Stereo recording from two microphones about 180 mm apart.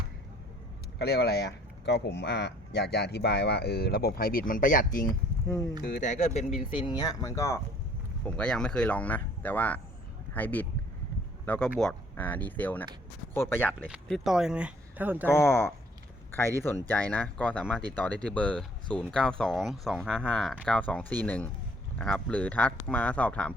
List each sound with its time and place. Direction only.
0.9 s speech: 65° left (ahead or behind); by 7.6 s 15° left (ahead or behind)
8.2 s speech: 5° left (ahead or behind)
13.8 s speech: 5° right (ahead or behind)
15.3 s speech: 15° left (ahead or behind)
16.9 s speech: 10° left (ahead or behind)